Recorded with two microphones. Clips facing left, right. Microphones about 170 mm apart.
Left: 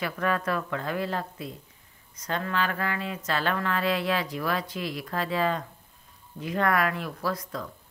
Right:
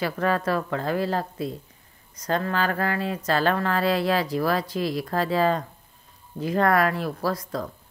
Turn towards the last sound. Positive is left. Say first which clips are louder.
# right 4 dB
turn(degrees=-40)  # may be behind; listen again after turning